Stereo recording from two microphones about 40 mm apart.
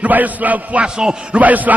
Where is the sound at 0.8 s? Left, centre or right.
Centre.